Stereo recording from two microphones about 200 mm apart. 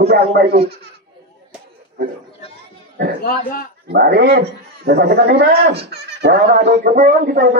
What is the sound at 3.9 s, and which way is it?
A man's voice, 55° right (ahead or behind).